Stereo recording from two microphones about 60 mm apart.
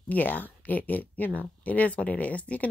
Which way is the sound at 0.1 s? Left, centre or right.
Left.